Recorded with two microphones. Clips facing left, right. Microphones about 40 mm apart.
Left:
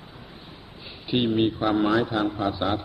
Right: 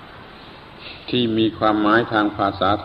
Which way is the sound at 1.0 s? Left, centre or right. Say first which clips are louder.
Right 4 dB; right.